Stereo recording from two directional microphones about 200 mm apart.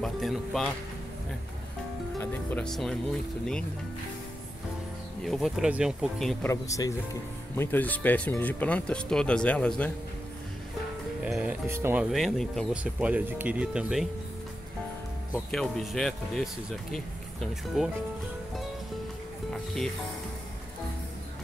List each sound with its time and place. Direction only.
0.0 s speech: centre (ahead or behind)
2.1 s speech: 5° left (ahead or behind)
5.2 s speech: centre (ahead or behind)
6.5 s speech: 15° left (ahead or behind)
11.2 s speech: 5° right (ahead or behind)
15.3 s speech: centre (ahead or behind)
19.5 s rub: centre (ahead or behind)